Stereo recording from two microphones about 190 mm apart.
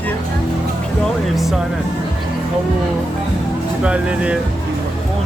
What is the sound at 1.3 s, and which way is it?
Speech, centre (ahead or behind).